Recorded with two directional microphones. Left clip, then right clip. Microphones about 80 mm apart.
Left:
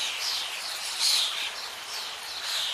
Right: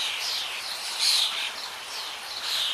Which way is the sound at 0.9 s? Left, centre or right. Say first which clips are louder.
Right 2 dB; centre.